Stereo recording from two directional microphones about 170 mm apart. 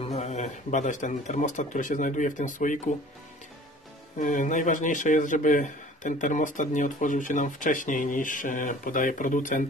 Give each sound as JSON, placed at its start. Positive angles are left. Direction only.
{"t": 0.0, "sound": "speech", "side_deg": 40}
{"t": 4.2, "sound": "speech", "side_deg": 50}